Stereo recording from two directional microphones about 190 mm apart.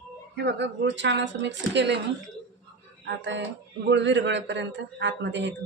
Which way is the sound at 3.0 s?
70° right (ahead or behind).